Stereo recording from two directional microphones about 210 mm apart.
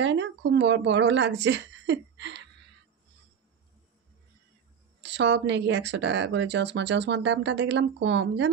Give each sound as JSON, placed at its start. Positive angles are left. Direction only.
{"t": 0.0, "sound": "speech", "side_deg": -55}
{"t": 5.0, "sound": "speech", "side_deg": -55}